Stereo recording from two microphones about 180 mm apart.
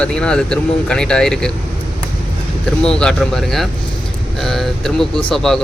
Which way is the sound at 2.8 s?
5° left (ahead or behind).